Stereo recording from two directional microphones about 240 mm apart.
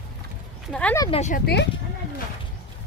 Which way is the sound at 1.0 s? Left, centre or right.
Left.